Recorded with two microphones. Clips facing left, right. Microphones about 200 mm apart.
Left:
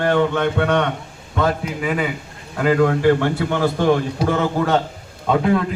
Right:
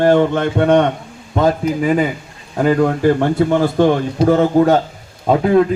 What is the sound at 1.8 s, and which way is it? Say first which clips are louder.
Speech: right 6 dB; 35° right (ahead or behind).